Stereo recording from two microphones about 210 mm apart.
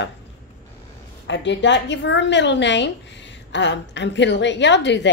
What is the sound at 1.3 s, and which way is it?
A woman's voice, 60° left (ahead or behind).